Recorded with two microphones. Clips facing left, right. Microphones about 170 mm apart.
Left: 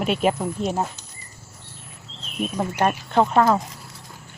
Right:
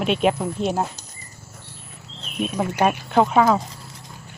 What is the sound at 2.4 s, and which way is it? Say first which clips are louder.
Speech: right 2 dB; centre (ahead or behind).